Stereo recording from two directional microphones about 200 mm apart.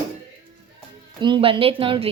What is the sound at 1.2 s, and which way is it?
Speech, 25° right (ahead or behind).